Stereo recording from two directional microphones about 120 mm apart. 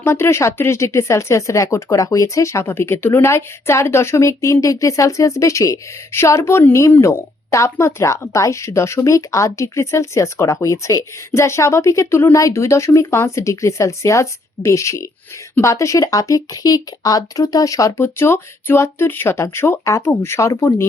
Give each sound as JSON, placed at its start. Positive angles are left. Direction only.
{"t": 0.0, "sound": "speech", "side_deg": 20}